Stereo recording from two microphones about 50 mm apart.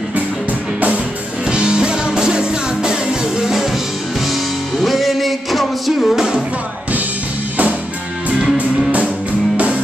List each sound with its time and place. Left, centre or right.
1.5 s music: centre
4.8 s music: centre
6.1 s music: centre
8.5 s music: right